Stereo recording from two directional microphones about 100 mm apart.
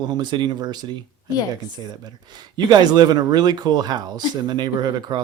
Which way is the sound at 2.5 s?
45° right (ahead or behind).